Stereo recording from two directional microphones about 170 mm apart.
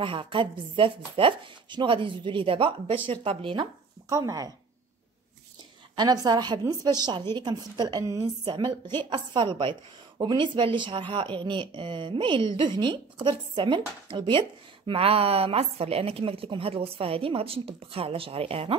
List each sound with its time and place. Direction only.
0.0 s speech: 30° right (ahead or behind)
4.1 s a woman's voice: 20° right (ahead or behind)
5.9 s a woman's voice: 20° right (ahead or behind)